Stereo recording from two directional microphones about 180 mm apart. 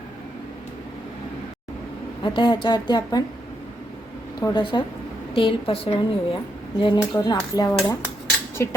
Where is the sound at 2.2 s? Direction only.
25° left (ahead or behind).